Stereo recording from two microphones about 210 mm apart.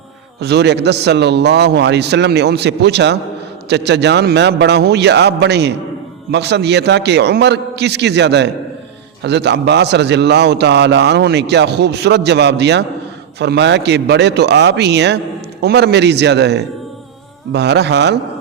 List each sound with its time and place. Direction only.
0.3 s a man's voice: 55° right (ahead or behind)